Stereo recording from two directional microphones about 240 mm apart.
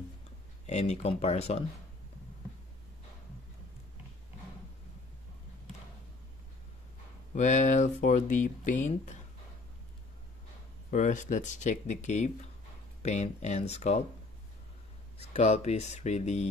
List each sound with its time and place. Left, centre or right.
0.7 s speech: left
7.3 s speech: left
10.9 s speech: left
15.3 s speech: left